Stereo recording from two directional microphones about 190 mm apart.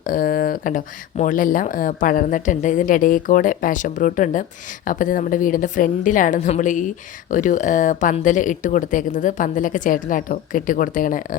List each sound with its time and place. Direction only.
0.0 s a woman's voice: 45° left (ahead or behind)